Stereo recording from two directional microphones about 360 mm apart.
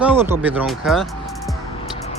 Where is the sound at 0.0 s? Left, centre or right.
Centre.